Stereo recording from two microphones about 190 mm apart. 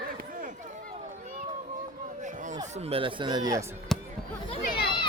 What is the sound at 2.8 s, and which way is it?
Speech, 30° right (ahead or behind).